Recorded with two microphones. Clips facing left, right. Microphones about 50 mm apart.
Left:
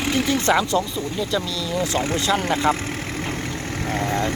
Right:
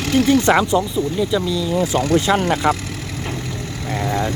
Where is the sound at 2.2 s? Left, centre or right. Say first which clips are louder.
Right 3 dB; right.